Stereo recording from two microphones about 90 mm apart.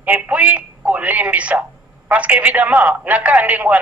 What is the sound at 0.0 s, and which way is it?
A woman's voice, 15° right (ahead or behind).